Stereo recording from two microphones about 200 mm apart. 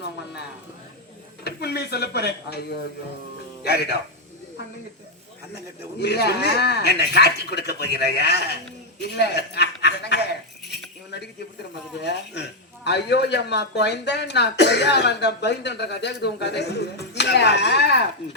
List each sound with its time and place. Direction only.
1.5 s a man's voice: 55° left (ahead or behind)
6.0 s a man's voice: 55° left (ahead or behind)
11.9 s a man's voice: 60° left (ahead or behind)